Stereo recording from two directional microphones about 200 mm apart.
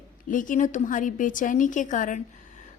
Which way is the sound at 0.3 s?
40° left (ahead or behind).